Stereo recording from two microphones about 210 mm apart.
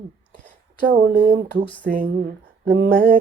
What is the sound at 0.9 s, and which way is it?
Speech, 35° right (ahead or behind).